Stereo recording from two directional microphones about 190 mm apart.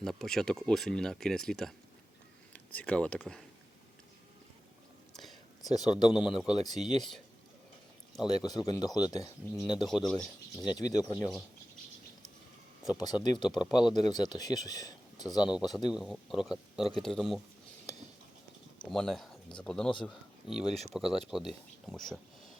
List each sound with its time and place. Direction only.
0.0 s speech: centre (ahead or behind)
5.6 s speech: 20° left (ahead or behind)
8.3 s speech: 20° left (ahead or behind)
9.8 s speech: centre (ahead or behind)
10.7 s speech: 20° left (ahead or behind)
12.9 s speech: 20° left (ahead or behind)
13.7 s speech: centre (ahead or behind)
13.9 s speech: 20° left (ahead or behind)
15.4 s speech: centre (ahead or behind)
18.9 s speech: centre (ahead or behind)
20.7 s speech: 35° right (ahead or behind)
20.9 s speech: centre (ahead or behind)